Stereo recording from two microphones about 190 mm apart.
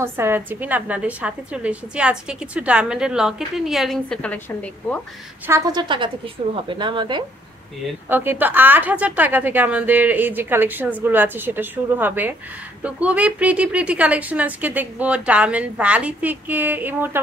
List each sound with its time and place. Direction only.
0.0 s a woman's voice: 10° right (ahead or behind); by 5.0 s 5° left (ahead or behind)
5.5 s a woman's voice: 20° right (ahead or behind)
8.1 s a woman's voice: 10° right (ahead or behind)